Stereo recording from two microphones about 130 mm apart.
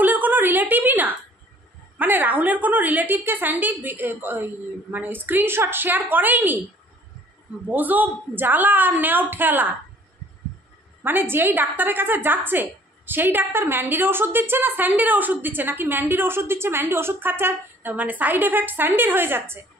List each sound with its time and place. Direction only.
0.0 s a sound: 15° right (ahead or behind)
2.0 s a woman's voice: 15° right (ahead or behind)
7.7 s a woman's voice: 15° right (ahead or behind)
11.0 s a woman's voice: 15° right (ahead or behind)